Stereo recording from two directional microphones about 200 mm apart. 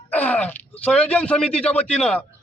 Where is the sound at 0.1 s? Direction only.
10° left (ahead or behind).